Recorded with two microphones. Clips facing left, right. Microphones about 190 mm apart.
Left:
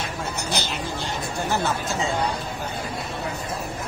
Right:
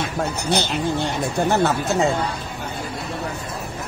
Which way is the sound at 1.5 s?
65° right (ahead or behind).